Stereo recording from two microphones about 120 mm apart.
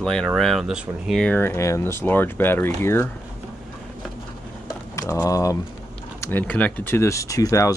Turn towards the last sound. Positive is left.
turn(degrees=25)  # may be behind; listen again after turning